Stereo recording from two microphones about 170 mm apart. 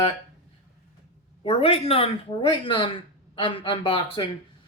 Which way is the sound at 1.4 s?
35° left (ahead or behind).